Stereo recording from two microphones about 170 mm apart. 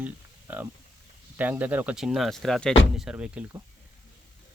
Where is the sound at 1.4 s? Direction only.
10° right (ahead or behind).